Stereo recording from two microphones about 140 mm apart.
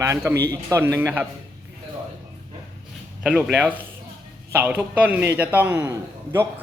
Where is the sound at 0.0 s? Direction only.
20° right (ahead or behind).